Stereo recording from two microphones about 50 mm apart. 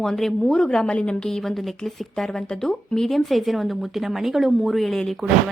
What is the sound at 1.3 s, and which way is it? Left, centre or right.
A woman's voice, centre.